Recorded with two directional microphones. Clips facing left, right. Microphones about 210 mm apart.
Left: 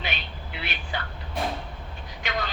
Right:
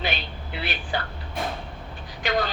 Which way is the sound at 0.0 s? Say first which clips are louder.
Right 5 dB; 35° right (ahead or behind).